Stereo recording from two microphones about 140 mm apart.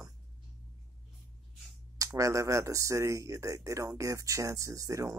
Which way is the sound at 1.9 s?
25° right (ahead or behind).